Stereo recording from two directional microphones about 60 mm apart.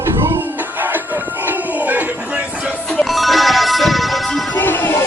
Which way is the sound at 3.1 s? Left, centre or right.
Centre.